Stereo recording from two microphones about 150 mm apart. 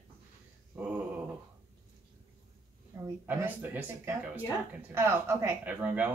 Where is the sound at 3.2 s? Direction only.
10° right (ahead or behind).